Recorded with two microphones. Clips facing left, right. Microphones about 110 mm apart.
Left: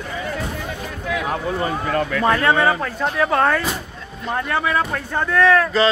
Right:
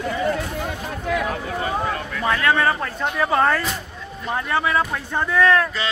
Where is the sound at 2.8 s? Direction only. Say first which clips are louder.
Left 2 dB; centre (ahead or behind).